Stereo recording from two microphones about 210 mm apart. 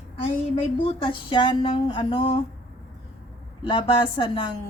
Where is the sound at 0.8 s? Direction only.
25° left (ahead or behind).